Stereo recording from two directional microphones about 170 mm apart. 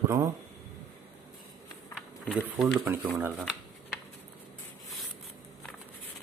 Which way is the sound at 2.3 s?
10° right (ahead or behind).